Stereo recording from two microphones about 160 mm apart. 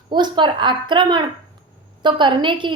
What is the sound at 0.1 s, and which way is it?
A woman's voice, 30° right (ahead or behind).